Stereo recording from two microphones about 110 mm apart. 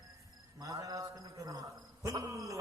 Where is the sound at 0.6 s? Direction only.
30° right (ahead or behind).